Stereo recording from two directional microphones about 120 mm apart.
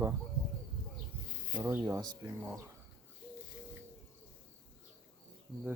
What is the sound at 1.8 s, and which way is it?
Speech, 30° right (ahead or behind).